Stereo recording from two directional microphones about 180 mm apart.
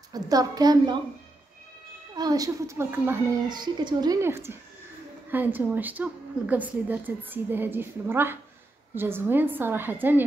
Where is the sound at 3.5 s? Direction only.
25° right (ahead or behind).